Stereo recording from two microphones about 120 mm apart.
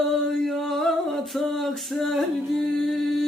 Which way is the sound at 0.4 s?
5° left (ahead or behind).